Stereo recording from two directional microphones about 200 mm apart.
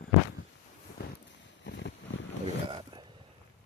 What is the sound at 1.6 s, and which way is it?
Boat, 60° left (ahead or behind).